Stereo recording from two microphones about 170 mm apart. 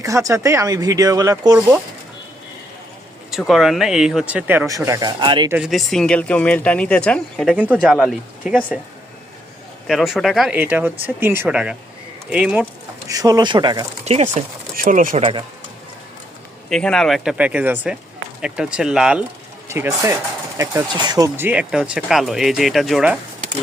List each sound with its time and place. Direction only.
0.0 s speech: 20° right (ahead or behind)
3.3 s speech: centre (ahead or behind); by 5.5 s 25° right (ahead or behind)
5.5 s speech: 5° right (ahead or behind)
7.5 s speech: 5° right (ahead or behind)
9.8 s speech: centre (ahead or behind)
13.1 s speech: 20° right (ahead or behind)
14.0 s speech: 40° right (ahead or behind)
14.8 s speech: 55° right (ahead or behind); by 15.4 s 35° right (ahead or behind)
16.6 s speech: 5° left (ahead or behind)
19.6 s speech: 15° right (ahead or behind)
21.3 s speech: 10° right (ahead or behind)